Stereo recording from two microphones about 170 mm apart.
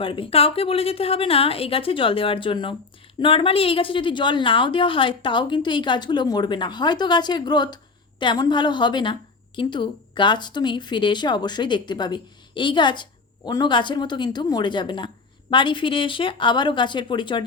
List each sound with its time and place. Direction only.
0.0 s a woman's voice: 30° left (ahead or behind)